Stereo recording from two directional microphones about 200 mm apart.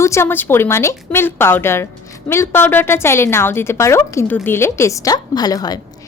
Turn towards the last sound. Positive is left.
turn(degrees=20)  # may be behind; listen again after turning